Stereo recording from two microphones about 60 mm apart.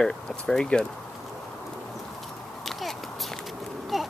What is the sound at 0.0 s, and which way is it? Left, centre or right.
Speech, centre.